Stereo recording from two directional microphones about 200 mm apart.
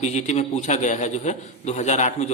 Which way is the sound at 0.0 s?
35° left (ahead or behind).